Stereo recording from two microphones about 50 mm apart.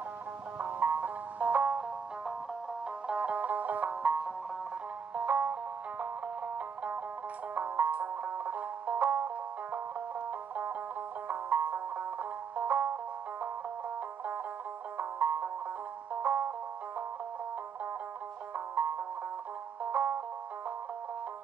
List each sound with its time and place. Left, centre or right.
0.6 s music: right
3.1 s music: right
15.0 s music: right
18.8 s music: right